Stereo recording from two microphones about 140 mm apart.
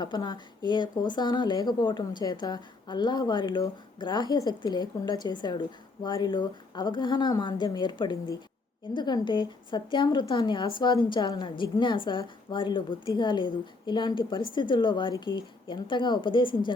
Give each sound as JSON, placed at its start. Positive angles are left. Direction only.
{"t": 0.0, "sound": "speech", "side_deg": 30}